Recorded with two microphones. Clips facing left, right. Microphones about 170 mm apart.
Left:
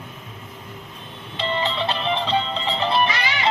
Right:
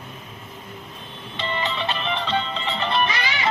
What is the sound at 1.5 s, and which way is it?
Music, 30° left (ahead or behind).